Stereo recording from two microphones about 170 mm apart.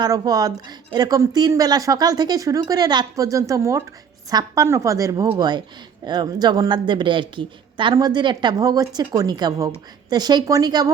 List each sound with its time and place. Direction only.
0.0 s a woman's voice: 20° right (ahead or behind)